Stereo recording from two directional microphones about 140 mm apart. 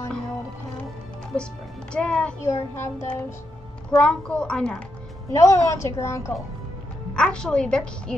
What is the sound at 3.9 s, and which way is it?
Speech, 5° left (ahead or behind).